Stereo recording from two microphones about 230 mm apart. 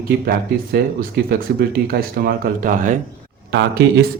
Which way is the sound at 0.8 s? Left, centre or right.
Right.